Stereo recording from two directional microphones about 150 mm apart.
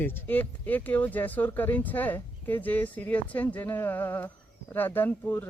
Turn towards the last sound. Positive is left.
turn(degrees=15)  # may be behind; listen again after turning